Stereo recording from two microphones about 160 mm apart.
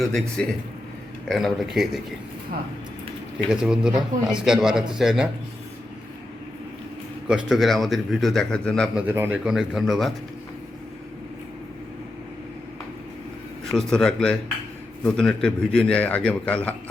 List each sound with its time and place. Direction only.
0.0 s a man's voice: centre (ahead or behind)
3.5 s a man's voice: 5° right (ahead or behind)
7.3 s a man's voice: 5° right (ahead or behind)
9.0 s a man's voice: 10° right (ahead or behind)
13.7 s a man's voice: 5° left (ahead or behind)